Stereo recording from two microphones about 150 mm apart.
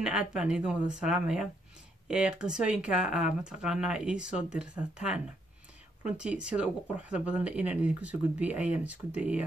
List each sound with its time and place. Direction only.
0.0 s speech: 5° right (ahead or behind)